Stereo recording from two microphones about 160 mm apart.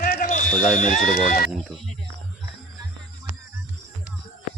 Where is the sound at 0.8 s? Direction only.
55° left (ahead or behind).